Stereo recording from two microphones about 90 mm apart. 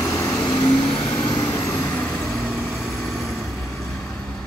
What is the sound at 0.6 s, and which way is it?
Vehicle, 70° left (ahead or behind).